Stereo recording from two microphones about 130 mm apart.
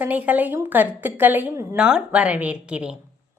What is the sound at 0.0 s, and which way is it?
A woman's voice, 10° right (ahead or behind).